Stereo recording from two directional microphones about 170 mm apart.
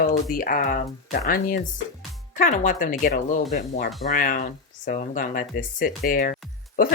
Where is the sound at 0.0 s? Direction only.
55° left (ahead or behind).